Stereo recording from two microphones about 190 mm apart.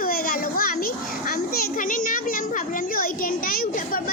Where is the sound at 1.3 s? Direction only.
50° left (ahead or behind).